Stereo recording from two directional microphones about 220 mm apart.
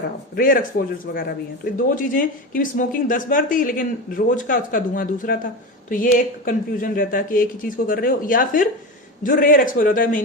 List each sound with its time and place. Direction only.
0.3 s speech: 40° left (ahead or behind)